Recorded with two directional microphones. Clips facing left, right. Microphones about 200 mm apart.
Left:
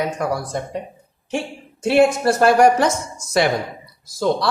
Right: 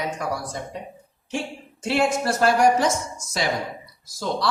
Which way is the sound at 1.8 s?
60° left (ahead or behind).